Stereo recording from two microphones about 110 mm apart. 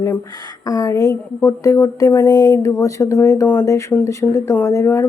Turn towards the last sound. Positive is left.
turn(degrees=20)  # may be behind; listen again after turning